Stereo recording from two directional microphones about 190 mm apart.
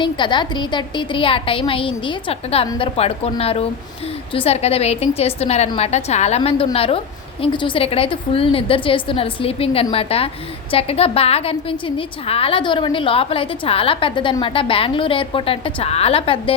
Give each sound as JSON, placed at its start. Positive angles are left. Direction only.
{"t": 0.0, "sound": "a woman's voice", "side_deg": 25}